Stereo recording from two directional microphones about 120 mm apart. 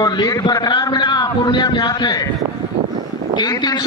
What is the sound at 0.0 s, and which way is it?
A man's voice, 30° left (ahead or behind).